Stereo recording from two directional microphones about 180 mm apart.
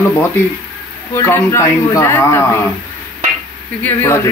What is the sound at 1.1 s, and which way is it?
Speech, 15° left (ahead or behind).